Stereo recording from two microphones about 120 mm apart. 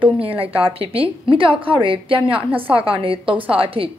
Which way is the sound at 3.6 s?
50° right (ahead or behind).